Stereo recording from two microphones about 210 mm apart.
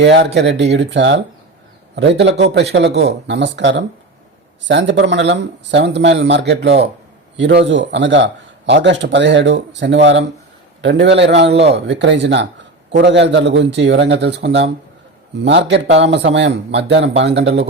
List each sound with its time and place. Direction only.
0.0 s a man's voice: 55° right (ahead or behind)